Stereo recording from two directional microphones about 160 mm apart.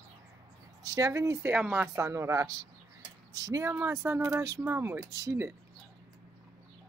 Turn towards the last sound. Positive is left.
turn(degrees=-20)  # may be behind; listen again after turning